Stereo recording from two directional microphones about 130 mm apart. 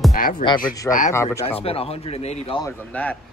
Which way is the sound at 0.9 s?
80° left.